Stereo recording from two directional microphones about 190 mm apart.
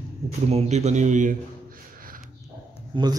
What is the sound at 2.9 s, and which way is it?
Speech, 25° right (ahead or behind).